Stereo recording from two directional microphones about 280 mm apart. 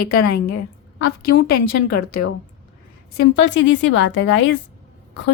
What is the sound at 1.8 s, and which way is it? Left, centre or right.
Speech, left.